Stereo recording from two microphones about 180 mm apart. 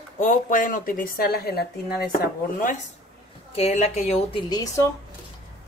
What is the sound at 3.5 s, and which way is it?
Speech, 35° left (ahead or behind).